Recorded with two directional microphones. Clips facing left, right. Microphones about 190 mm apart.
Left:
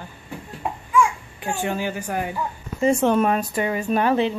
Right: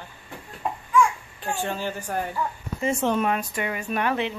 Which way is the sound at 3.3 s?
35° left (ahead or behind).